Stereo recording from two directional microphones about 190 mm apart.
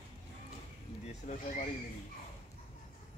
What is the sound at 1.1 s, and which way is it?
Speech, 40° left (ahead or behind).